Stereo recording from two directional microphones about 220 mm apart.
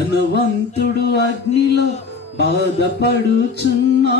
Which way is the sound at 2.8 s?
50° left (ahead or behind).